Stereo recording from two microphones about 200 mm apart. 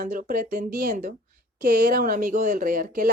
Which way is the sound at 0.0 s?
45° right (ahead or behind).